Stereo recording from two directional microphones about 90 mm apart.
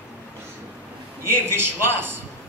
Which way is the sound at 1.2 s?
25° right (ahead or behind).